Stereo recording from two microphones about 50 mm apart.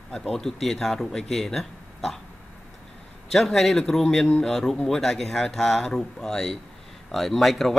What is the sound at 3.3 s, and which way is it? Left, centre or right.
A man's voice, centre.